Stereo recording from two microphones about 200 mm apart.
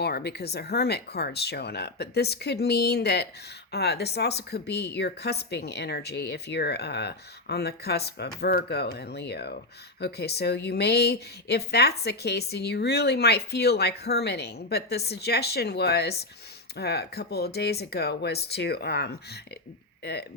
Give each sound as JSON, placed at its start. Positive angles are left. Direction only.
{"t": 0.0, "sound": "a woman's voice", "side_deg": 55}